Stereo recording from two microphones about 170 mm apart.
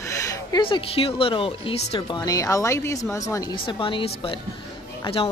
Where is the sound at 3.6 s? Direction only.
30° left (ahead or behind).